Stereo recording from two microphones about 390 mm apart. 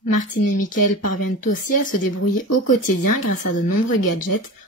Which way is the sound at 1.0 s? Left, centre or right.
Left.